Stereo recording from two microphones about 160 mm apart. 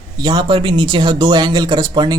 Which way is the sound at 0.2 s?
25° right (ahead or behind).